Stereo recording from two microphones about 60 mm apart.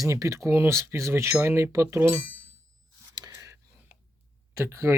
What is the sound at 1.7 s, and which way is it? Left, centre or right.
Speech, right.